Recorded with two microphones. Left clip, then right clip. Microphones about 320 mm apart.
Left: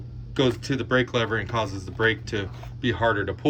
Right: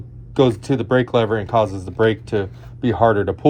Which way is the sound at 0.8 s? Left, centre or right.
Centre.